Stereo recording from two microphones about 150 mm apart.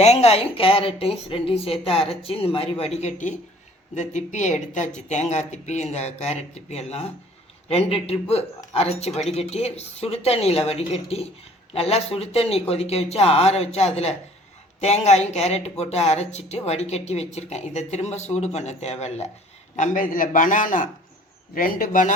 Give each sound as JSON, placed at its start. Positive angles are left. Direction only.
{"t": 0.0, "sound": "a woman's voice", "side_deg": 45}